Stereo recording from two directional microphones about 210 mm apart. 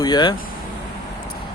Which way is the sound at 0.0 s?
20° left (ahead or behind).